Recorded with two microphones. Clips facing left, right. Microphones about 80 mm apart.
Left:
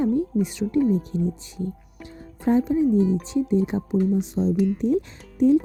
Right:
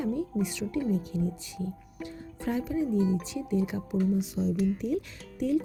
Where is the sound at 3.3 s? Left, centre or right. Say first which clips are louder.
Left 8 dB; left.